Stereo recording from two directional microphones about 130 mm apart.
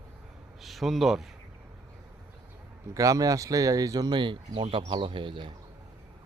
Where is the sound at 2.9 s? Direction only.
25° right (ahead or behind).